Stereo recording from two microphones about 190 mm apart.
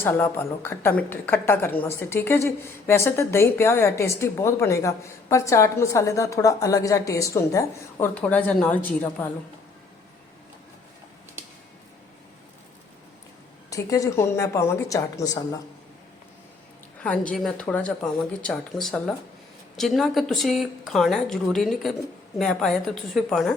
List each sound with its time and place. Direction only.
0.0 s a woman's voice: 10° left (ahead or behind)
13.7 s a woman's voice: 15° left (ahead or behind)
17.0 s speech: 5° left (ahead or behind)